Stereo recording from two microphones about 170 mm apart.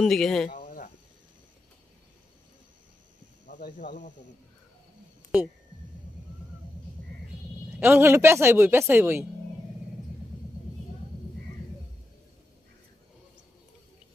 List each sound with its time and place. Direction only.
0.0 s speech: centre (ahead or behind)
3.4 s speech: 50° left (ahead or behind)
7.8 s speech: 15° right (ahead or behind)